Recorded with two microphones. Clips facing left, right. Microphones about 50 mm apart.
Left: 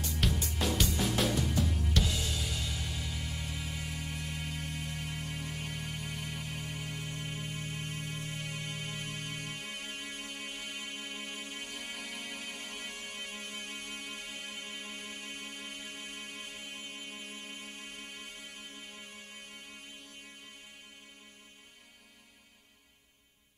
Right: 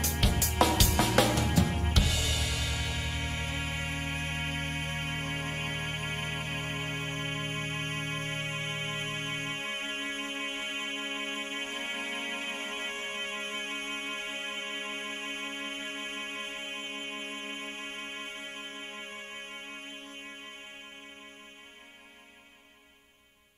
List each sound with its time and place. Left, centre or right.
0.3 s music: right
1.7 s music: right
2.0 s music: right